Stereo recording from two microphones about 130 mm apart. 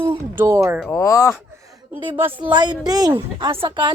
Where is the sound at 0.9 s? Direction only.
20° left (ahead or behind).